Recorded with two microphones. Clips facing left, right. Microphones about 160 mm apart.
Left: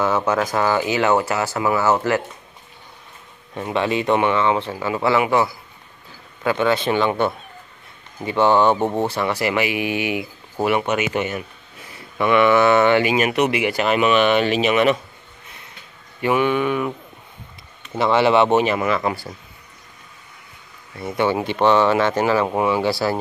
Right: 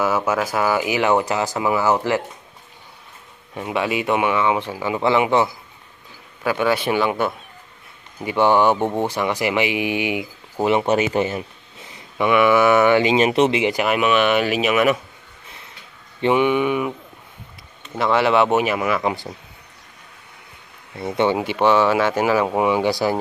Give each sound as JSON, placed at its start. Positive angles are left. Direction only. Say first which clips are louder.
{"t": 0.0, "sound": "speech", "louder": "left 1 dB", "side_deg": -10}
{"t": 3.5, "sound": "speech", "louder": "left 1 dB", "side_deg": -10}
{"t": 6.4, "sound": "speech", "louder": "left 1 dB", "side_deg": -10}
{"t": 13.1, "sound": "speech", "louder": "right 2 dB", "side_deg": -25}
{"t": 16.2, "sound": "speech", "louder": "right 1 dB", "side_deg": -20}
{"t": 17.9, "sound": "speech", "louder": "left 1 dB", "side_deg": 0}
{"t": 20.9, "sound": "speech", "louder": "right 1 dB", "side_deg": -25}